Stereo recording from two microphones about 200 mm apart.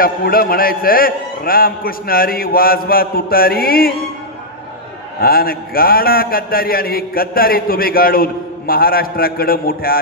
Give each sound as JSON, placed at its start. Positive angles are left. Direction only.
{"t": 0.0, "sound": "a man's voice", "side_deg": 50}
{"t": 5.2, "sound": "a man's voice", "side_deg": 50}